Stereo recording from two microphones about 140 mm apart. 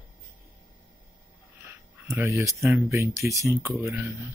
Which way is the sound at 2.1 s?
20° right (ahead or behind).